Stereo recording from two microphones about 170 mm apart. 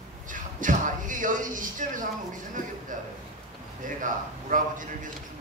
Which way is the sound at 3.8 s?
50° right (ahead or behind).